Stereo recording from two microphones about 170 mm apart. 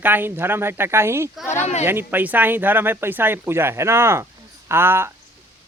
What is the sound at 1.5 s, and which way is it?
Speech, 40° left (ahead or behind).